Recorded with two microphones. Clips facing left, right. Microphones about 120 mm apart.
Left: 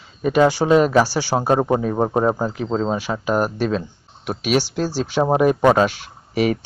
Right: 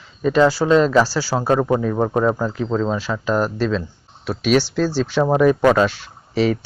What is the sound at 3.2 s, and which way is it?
Speech, 15° left (ahead or behind).